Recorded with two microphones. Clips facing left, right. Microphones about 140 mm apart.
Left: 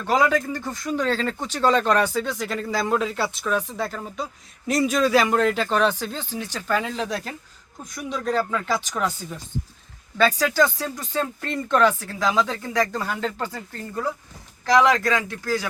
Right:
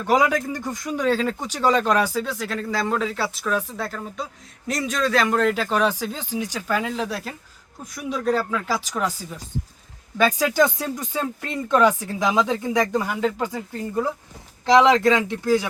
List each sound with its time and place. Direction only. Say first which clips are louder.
0.0 s speech: right 1 dB; 10° right (ahead or behind)